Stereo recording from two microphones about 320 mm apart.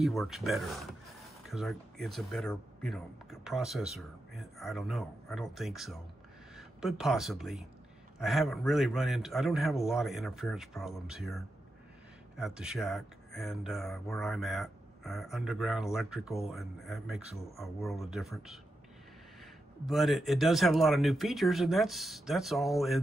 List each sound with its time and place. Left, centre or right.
0.0 s speech: centre
19.9 s speech: centre